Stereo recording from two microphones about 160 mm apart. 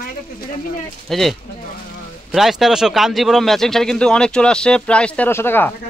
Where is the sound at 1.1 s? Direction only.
Centre (ahead or behind).